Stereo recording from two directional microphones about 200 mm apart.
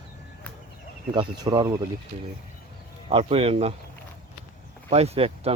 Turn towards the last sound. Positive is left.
turn(degrees=-30)  # may be behind; listen again after turning